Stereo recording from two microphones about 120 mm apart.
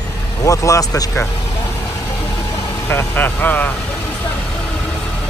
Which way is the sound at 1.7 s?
25° left (ahead or behind).